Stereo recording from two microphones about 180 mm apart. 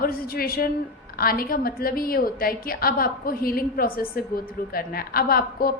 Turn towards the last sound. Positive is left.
turn(degrees=55)  # may be behind; listen again after turning